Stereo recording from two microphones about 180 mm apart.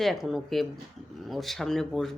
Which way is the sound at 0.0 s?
Centre (ahead or behind).